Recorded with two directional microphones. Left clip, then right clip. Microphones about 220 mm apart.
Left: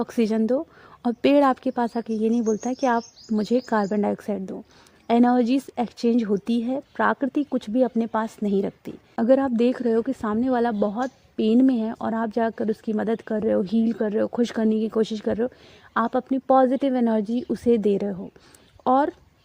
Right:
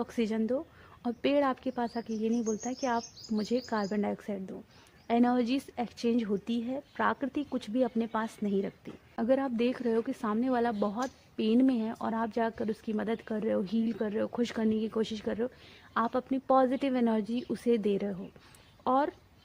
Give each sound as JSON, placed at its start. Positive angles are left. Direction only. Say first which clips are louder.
{"t": 0.0, "sound": "speech", "louder": "left 9 dB", "side_deg": 45}